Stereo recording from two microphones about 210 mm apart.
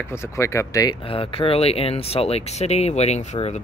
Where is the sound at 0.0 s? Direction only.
10° left (ahead or behind).